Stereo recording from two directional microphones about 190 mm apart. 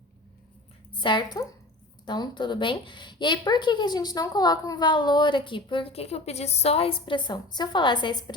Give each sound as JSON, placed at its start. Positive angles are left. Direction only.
{"t": 0.9, "sound": "a woman's voice", "side_deg": 25}